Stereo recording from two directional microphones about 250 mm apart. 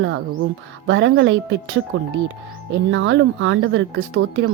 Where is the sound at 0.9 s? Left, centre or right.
Right.